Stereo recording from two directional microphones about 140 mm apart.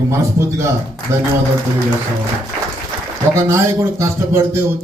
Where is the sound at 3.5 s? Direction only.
20° right (ahead or behind).